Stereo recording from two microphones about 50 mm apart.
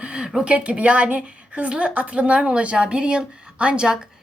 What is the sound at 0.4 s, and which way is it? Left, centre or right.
A woman's voice, right.